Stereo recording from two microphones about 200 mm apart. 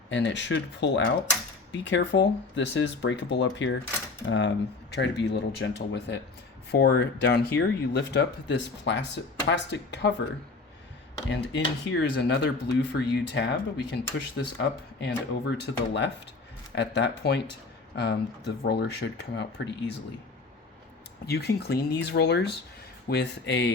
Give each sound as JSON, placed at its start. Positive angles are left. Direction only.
{"t": 0.1, "sound": "speech", "side_deg": 65}
{"t": 11.3, "sound": "speech", "side_deg": 60}
{"t": 21.2, "sound": "speech", "side_deg": 55}